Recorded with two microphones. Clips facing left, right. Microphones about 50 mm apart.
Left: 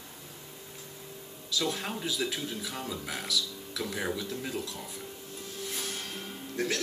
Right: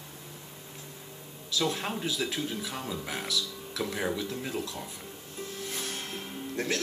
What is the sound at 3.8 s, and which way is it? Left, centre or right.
Speech, centre.